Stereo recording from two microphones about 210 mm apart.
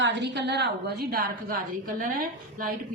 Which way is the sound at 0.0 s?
55° right (ahead or behind).